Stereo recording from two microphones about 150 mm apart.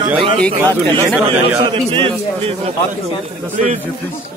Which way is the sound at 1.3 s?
40° right (ahead or behind).